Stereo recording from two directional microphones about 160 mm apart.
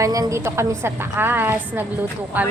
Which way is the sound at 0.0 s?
20° right (ahead or behind).